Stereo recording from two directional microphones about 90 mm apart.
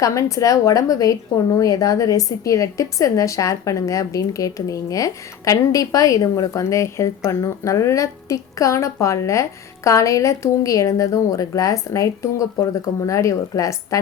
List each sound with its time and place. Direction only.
0.0 s a woman's voice: 40° left (ahead or behind)